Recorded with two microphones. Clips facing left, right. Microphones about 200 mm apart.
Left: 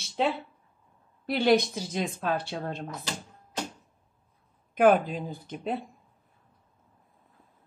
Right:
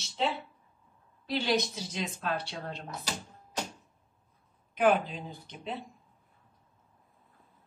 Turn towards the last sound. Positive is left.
turn(degrees=50)  # may be behind; listen again after turning